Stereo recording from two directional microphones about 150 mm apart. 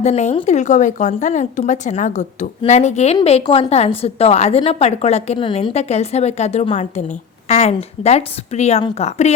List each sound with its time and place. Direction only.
0.0 s a woman's voice: 50° left (ahead or behind)